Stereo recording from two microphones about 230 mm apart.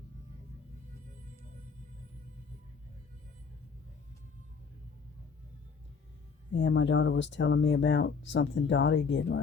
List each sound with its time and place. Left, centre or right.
6.5 s speech: left